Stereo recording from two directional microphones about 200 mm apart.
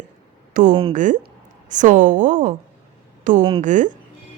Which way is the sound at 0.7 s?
25° right (ahead or behind).